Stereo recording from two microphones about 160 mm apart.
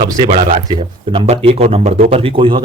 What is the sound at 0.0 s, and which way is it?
Speech, 30° right (ahead or behind).